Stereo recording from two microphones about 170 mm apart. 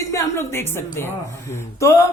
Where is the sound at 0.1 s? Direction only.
15° left (ahead or behind).